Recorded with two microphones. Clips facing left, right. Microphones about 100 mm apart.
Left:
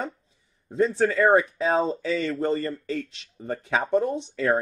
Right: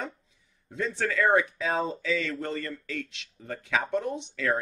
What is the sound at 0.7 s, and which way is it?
Speech, 35° left (ahead or behind).